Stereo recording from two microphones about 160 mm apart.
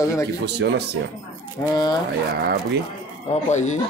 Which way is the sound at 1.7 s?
25° left (ahead or behind).